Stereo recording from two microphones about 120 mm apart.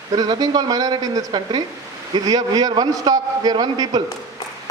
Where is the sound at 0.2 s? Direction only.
30° right (ahead or behind).